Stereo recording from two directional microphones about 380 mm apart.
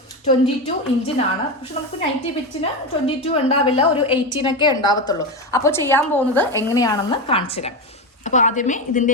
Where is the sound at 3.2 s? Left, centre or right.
Centre.